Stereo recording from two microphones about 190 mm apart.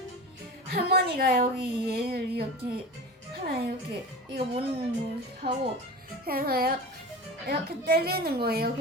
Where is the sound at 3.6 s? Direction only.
55° right (ahead or behind).